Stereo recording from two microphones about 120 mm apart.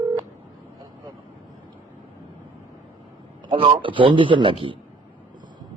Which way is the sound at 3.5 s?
45° right (ahead or behind).